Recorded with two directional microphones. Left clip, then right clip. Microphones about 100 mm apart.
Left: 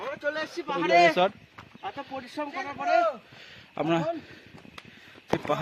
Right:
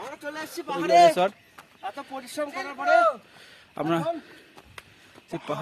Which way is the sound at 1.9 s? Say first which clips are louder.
Even; 90° right.